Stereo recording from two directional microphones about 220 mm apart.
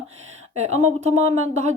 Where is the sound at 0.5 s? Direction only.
30° right (ahead or behind).